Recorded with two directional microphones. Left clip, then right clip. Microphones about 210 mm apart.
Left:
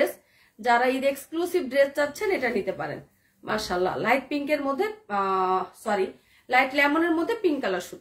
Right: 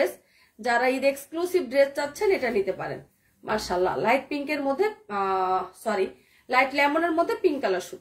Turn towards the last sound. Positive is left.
turn(degrees=20)  # may be behind; listen again after turning